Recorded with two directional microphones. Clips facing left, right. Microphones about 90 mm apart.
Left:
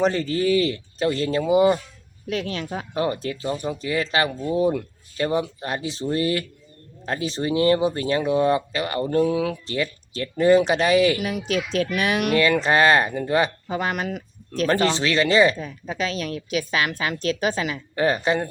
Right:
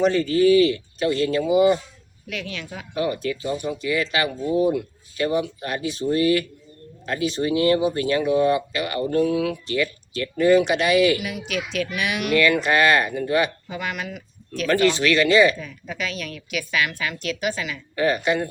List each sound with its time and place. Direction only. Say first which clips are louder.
0.0 s speech: right 3 dB; 35° left (ahead or behind)